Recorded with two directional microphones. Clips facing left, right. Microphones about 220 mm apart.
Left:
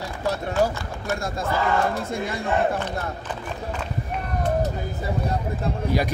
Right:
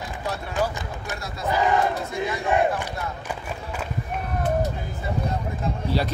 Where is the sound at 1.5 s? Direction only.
15° right (ahead or behind).